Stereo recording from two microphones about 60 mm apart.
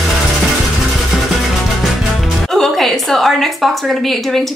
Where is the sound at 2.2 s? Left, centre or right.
Centre.